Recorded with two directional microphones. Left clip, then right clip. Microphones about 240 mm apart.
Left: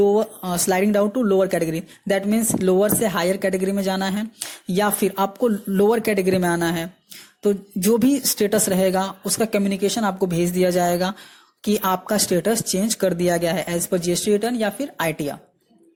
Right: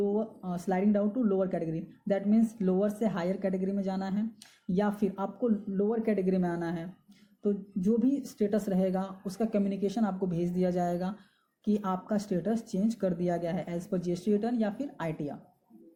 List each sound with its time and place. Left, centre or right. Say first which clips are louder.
0.0 s speech: left 13 dB; left